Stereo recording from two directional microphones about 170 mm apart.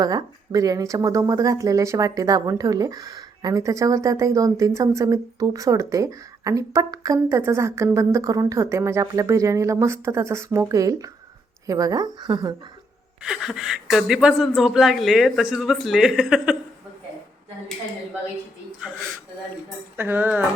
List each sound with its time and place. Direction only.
0.0 s speech: 20° right (ahead or behind)
13.2 s speech: 5° right (ahead or behind)
18.8 s speech: 5° right (ahead or behind)
20.0 s speech: 10° right (ahead or behind)